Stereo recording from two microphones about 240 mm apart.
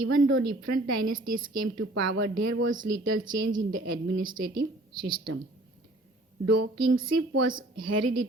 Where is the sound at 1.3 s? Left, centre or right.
Right.